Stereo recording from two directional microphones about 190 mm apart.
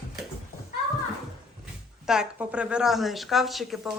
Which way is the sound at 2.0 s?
5° right (ahead or behind).